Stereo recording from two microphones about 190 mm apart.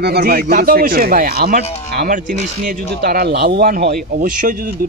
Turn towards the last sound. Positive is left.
turn(degrees=-45)  # may be behind; listen again after turning